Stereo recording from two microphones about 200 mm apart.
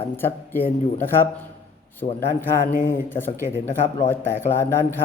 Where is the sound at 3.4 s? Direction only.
10° right (ahead or behind).